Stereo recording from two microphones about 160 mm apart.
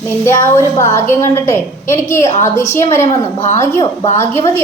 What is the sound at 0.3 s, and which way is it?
A woman's voice, 15° left (ahead or behind).